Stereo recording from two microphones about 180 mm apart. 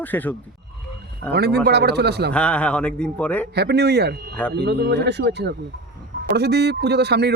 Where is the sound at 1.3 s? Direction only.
65° right (ahead or behind).